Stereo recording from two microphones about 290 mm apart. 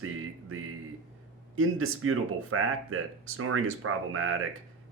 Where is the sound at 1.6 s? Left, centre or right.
Right.